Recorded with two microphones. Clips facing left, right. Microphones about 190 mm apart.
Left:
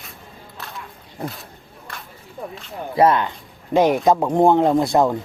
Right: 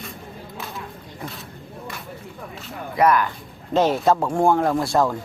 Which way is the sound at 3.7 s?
15° left (ahead or behind).